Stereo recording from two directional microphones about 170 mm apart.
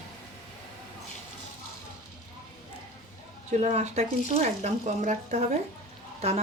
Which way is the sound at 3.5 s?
40° right (ahead or behind).